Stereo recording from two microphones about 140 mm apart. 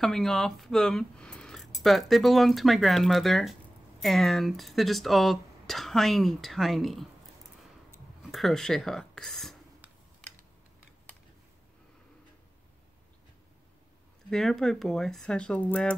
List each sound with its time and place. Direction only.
0.0 s speech: 5° left (ahead or behind)
8.3 s speech: centre (ahead or behind)
14.3 s speech: 5° left (ahead or behind)